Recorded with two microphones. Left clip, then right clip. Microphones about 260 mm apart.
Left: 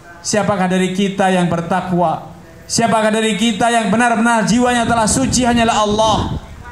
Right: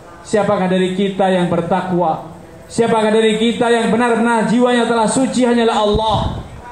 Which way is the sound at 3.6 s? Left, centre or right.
Left.